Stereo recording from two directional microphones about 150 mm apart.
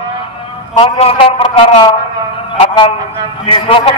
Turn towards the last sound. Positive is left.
turn(degrees=35)  # may be behind; listen again after turning